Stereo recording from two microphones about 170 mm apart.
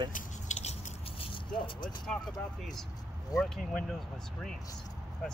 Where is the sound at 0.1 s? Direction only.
40° left (ahead or behind).